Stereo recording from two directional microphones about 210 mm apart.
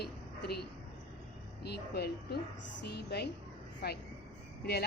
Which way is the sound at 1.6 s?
50° left (ahead or behind).